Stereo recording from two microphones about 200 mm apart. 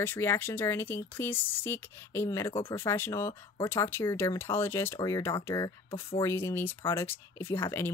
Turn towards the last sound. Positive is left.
turn(degrees=10)  # may be behind; listen again after turning